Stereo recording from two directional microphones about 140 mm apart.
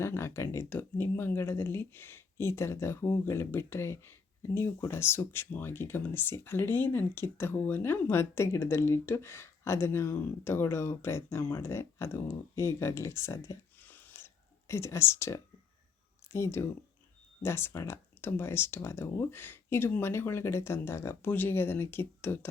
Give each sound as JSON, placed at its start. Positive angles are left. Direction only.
{"t": 0.0, "sound": "speech", "side_deg": 20}
{"t": 13.8, "sound": "a sound", "side_deg": 10}
{"t": 14.7, "sound": "speech", "side_deg": 20}